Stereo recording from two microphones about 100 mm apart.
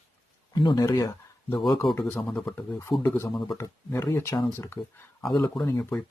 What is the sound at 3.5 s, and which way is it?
Speech, 25° left (ahead or behind).